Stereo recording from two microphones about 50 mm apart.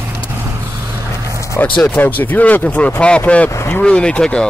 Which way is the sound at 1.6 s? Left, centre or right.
Left.